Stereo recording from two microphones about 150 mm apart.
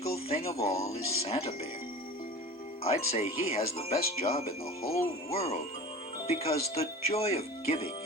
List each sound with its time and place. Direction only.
0.3 s speech: 40° left (ahead or behind)
2.8 s speech: 40° left (ahead or behind)